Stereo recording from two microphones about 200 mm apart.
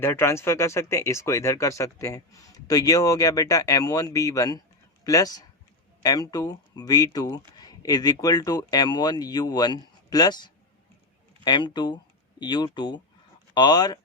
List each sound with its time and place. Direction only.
0.0 s speech: 10° left (ahead or behind)